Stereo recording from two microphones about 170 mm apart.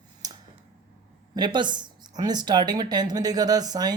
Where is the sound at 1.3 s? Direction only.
25° right (ahead or behind).